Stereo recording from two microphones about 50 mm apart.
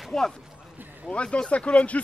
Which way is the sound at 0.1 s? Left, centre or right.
Centre.